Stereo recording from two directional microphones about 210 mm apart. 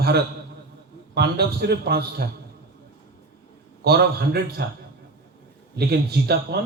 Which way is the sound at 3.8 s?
50° right (ahead or behind).